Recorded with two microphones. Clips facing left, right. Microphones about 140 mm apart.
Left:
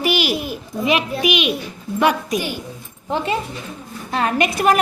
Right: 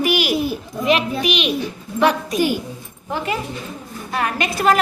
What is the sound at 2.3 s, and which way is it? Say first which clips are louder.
Speech: right 4 dB; 40° right (ahead or behind).